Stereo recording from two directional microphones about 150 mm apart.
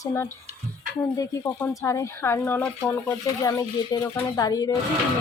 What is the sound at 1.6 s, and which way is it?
Speech, 20° left (ahead or behind).